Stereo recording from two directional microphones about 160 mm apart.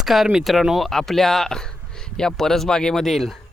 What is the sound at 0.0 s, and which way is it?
Speech, centre (ahead or behind).